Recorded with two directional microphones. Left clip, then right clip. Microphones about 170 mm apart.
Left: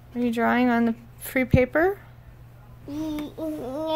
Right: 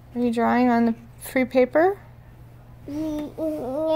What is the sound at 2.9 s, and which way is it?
Speech, 20° left (ahead or behind).